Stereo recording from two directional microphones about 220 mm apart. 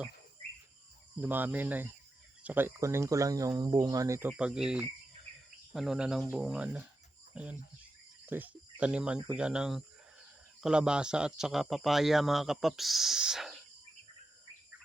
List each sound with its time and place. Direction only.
1.2 s speech: 10° right (ahead or behind)